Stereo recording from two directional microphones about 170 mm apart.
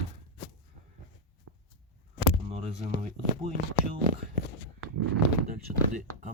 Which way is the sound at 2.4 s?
35° right (ahead or behind).